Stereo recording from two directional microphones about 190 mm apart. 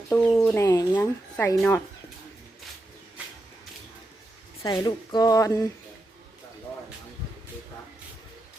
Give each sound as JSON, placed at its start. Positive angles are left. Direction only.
{"t": 0.1, "sound": "speech", "side_deg": 10}
{"t": 4.6, "sound": "speech", "side_deg": 20}